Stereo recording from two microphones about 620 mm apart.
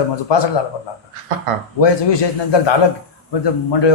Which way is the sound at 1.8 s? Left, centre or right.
Left.